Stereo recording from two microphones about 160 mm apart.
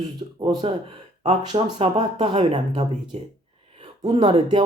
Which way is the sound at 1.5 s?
40° right (ahead or behind).